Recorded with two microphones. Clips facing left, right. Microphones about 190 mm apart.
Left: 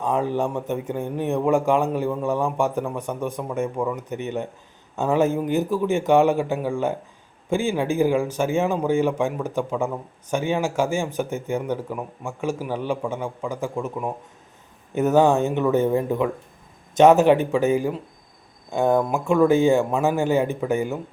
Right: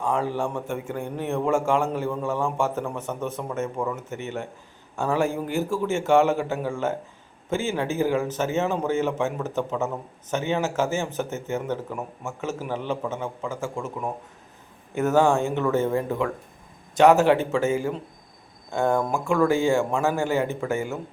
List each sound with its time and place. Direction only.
0.0 s speech: 20° left (ahead or behind)